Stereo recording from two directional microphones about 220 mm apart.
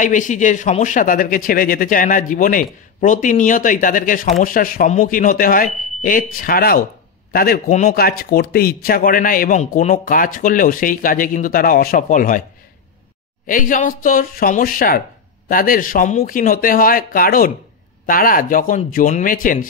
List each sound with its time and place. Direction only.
0.0 s speech: 35° left (ahead or behind)
13.5 s speech: 35° left (ahead or behind)